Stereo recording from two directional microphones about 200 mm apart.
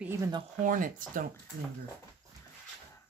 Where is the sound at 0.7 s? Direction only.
45° right (ahead or behind).